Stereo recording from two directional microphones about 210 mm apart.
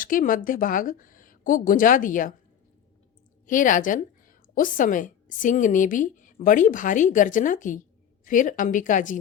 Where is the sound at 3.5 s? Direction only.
40° left (ahead or behind).